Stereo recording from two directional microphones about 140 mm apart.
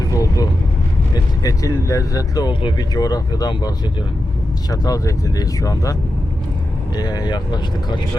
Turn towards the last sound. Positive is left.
turn(degrees=30)  # may be behind; listen again after turning